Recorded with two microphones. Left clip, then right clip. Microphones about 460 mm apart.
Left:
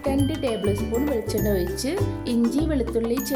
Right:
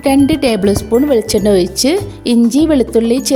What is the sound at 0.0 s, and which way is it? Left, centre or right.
Speech, left.